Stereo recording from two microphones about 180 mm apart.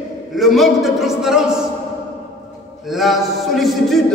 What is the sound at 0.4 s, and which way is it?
Music, centre (ahead or behind).